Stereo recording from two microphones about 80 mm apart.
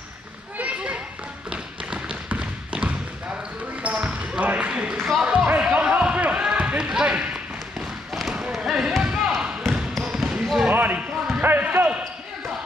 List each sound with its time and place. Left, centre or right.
0.6 s a sound: centre
1.5 s tap: centre
3.8 s basketball bounce: centre
9.6 s basketball bounce: centre
10.0 s basketball bounce: centre
10.7 s basketball bounce: right